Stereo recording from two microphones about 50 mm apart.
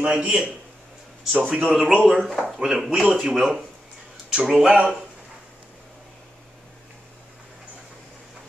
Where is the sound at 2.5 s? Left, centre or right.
Centre.